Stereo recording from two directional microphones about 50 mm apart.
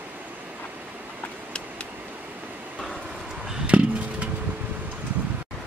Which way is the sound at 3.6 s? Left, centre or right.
Right.